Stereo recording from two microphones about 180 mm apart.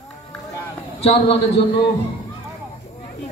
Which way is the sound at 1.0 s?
35° left (ahead or behind).